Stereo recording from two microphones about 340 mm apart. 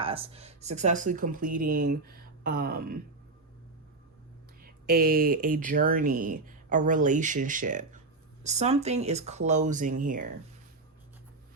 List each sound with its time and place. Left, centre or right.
0.0 s speech: centre
4.6 s speech: right